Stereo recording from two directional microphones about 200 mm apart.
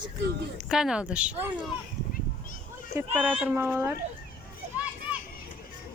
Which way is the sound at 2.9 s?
10° right (ahead or behind).